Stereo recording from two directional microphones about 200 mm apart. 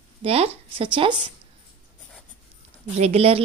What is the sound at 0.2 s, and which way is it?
Speech, 30° right (ahead or behind).